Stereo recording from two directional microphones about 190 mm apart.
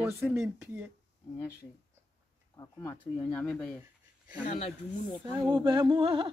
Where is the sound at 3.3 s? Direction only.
5° left (ahead or behind).